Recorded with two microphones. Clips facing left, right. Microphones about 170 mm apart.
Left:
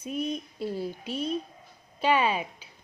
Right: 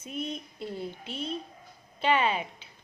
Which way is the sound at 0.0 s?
10° left (ahead or behind).